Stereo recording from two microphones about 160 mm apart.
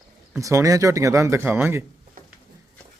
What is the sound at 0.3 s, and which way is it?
Speech, 20° right (ahead or behind).